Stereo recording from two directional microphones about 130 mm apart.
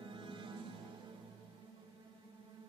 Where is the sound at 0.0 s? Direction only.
40° right (ahead or behind).